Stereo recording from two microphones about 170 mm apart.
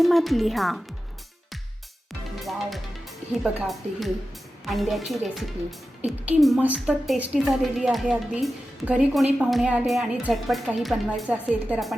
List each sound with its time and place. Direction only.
0.0 s a woman's voice: centre (ahead or behind)
2.4 s music: centre (ahead or behind)
3.4 s a woman's voice: centre (ahead or behind)